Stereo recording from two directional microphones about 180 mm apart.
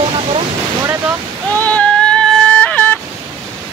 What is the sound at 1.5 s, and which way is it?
Music, 10° left (ahead or behind).